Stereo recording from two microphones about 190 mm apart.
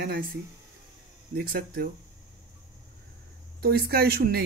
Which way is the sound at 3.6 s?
55° right (ahead or behind).